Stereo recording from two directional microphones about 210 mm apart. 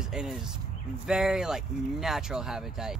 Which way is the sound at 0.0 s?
5° right (ahead or behind).